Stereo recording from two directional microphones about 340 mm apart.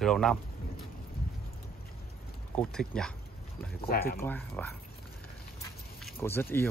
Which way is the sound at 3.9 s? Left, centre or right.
Left.